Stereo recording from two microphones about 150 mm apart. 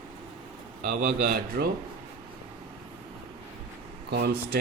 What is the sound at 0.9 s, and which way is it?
Speech, 70° right (ahead or behind).